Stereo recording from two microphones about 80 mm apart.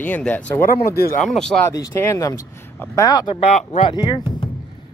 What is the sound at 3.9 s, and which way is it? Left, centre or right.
Speech, left.